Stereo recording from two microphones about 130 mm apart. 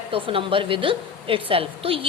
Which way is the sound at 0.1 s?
45° right (ahead or behind).